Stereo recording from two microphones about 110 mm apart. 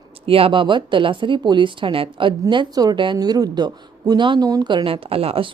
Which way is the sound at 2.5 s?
40° right (ahead or behind).